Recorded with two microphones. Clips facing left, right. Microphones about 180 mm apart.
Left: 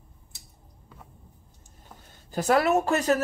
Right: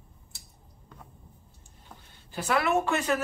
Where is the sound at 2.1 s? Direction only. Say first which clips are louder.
Left 5 dB; 45° left (ahead or behind).